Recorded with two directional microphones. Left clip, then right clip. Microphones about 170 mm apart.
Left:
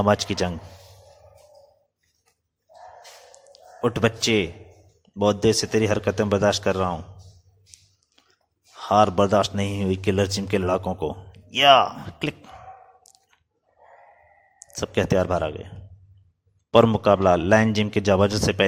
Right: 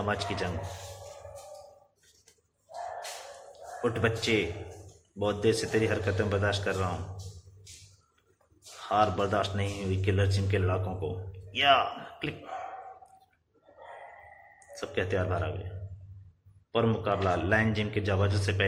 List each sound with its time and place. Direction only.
0.0 s a man's voice: 50° left (ahead or behind)
3.5 s a man's voice: 50° left (ahead or behind)
8.8 s a man's voice: 50° left (ahead or behind)
14.7 s a man's voice: 55° left (ahead or behind)
16.7 s a man's voice: 50° left (ahead or behind)